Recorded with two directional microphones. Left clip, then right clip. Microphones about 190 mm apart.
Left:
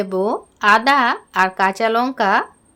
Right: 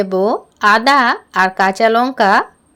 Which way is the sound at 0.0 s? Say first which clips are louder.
Right 5 dB; 20° right (ahead or behind).